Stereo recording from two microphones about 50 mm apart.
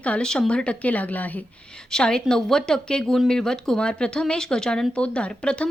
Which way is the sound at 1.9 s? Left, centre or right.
Centre.